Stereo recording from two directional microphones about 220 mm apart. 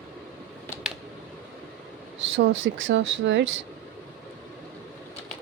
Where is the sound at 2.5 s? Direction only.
60° right (ahead or behind).